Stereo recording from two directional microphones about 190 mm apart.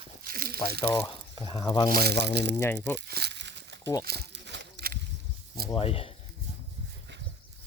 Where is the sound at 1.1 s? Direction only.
25° left (ahead or behind).